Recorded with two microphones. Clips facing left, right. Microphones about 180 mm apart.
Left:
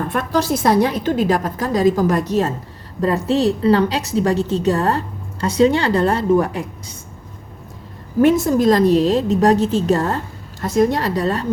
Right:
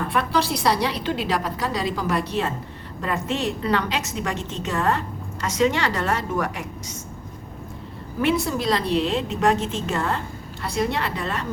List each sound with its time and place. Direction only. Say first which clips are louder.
0.1 s a woman's voice: left 4 dB; 45° left (ahead or behind)
8.2 s a woman's voice: left 9 dB; 45° left (ahead or behind)